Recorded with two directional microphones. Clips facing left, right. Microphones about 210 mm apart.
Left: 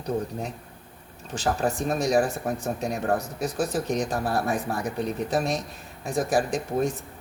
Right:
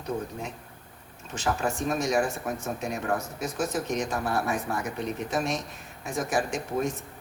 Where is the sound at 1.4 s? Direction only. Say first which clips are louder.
Left 3 dB; 35° left (ahead or behind).